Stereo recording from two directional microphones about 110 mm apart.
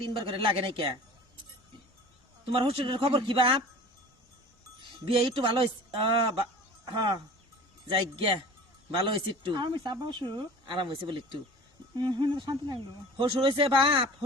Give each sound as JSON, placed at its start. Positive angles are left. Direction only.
{"t": 0.1, "sound": "speech", "side_deg": -50}
{"t": 2.5, "sound": "speech", "side_deg": -55}
{"t": 4.8, "sound": "speech", "side_deg": -50}
{"t": 7.9, "sound": "speech", "side_deg": -50}